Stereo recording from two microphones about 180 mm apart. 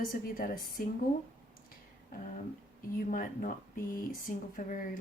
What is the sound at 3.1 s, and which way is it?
Speech, 45° left (ahead or behind).